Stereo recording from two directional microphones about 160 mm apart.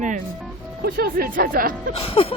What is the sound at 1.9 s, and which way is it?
Music, 35° left (ahead or behind).